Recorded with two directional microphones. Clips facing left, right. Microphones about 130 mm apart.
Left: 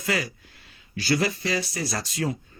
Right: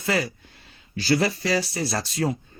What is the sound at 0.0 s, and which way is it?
Speech, 30° right (ahead or behind).